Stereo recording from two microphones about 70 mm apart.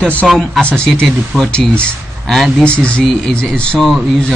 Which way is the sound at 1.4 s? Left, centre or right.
Centre.